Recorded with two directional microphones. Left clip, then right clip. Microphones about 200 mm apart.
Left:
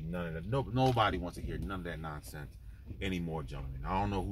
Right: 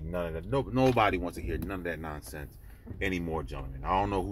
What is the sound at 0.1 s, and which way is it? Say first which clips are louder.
Speech: right 6 dB; 20° left (ahead or behind).